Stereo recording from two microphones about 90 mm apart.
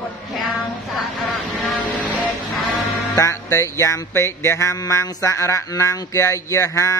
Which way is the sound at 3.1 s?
35° left (ahead or behind).